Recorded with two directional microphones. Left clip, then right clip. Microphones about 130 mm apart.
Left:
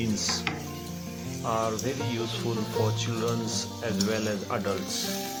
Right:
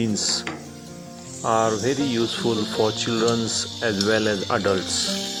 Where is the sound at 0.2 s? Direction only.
55° right (ahead or behind).